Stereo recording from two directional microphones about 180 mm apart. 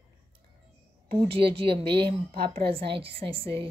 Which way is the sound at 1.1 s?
25° right (ahead or behind).